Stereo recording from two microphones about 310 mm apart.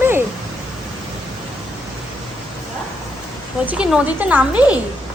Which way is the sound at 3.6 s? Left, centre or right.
Centre.